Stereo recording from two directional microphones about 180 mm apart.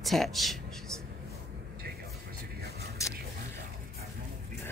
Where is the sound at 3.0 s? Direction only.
15° left (ahead or behind).